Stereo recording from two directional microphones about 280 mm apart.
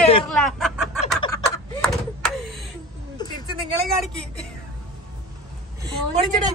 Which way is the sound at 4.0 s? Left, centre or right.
Centre.